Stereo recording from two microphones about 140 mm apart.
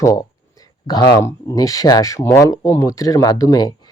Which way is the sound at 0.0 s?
25° left (ahead or behind).